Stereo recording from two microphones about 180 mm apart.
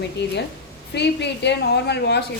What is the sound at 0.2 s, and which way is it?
A woman's voice, 70° left (ahead or behind).